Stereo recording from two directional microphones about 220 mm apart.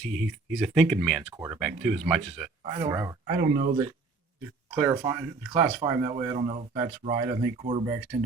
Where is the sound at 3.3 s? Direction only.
40° right (ahead or behind).